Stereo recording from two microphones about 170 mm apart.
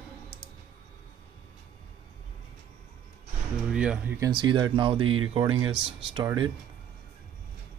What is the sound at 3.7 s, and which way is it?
Speech, 5° right (ahead or behind).